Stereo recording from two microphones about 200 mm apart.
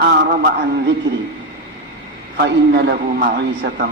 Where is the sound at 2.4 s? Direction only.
55° right (ahead or behind).